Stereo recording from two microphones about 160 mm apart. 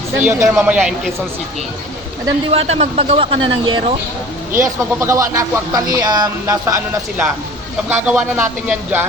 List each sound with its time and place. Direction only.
0.3 s speech: 15° right (ahead or behind)
2.5 s speech: 40° right (ahead or behind)
4.6 s speech: 20° right (ahead or behind)
7.9 s speech: 10° right (ahead or behind)